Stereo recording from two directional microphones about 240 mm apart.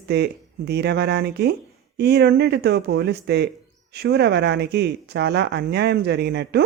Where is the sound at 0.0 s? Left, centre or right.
Right.